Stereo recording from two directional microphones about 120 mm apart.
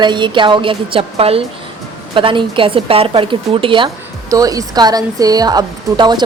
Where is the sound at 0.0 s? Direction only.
40° right (ahead or behind).